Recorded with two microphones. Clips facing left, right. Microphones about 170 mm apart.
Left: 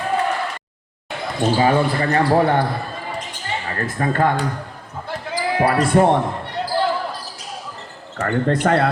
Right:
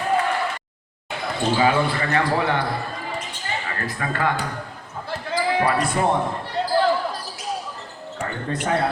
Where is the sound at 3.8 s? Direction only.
40° left (ahead or behind).